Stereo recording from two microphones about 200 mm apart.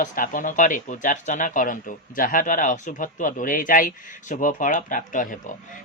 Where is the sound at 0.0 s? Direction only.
40° left (ahead or behind).